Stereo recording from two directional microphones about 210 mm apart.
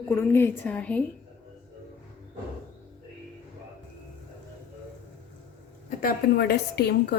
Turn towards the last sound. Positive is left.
turn(degrees=50)  # may be behind; listen again after turning